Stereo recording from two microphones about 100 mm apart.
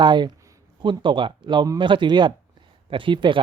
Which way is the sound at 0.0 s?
50° right (ahead or behind).